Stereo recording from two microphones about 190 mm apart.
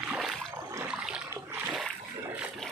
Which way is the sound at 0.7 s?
10° right (ahead or behind).